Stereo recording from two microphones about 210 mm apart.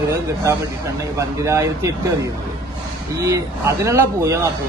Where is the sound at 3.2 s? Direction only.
15° right (ahead or behind).